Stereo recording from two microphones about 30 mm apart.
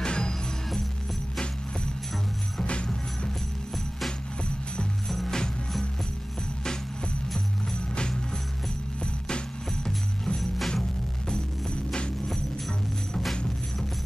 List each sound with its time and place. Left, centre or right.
0.0 s music: left
2.6 s music: left
5.0 s music: centre
9.8 s music: left